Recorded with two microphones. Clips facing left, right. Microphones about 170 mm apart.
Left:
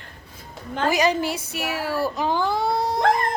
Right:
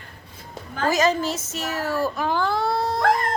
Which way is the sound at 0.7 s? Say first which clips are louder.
Even; 20° left (ahead or behind).